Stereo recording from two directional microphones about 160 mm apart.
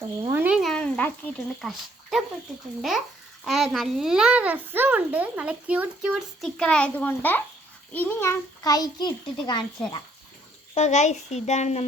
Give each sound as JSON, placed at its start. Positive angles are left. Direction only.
{"t": 0.2, "sound": "a sound", "side_deg": -15}
{"t": 1.6, "sound": "speech", "side_deg": 0}
{"t": 3.4, "sound": "a child's voice", "side_deg": 0}
{"t": 10.8, "sound": "a child's voice", "side_deg": 45}